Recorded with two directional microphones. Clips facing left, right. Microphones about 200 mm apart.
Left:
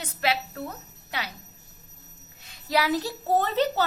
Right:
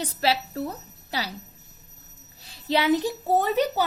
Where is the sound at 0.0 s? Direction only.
35° right (ahead or behind).